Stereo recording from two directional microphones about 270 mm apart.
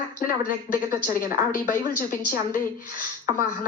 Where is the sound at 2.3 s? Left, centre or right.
Left.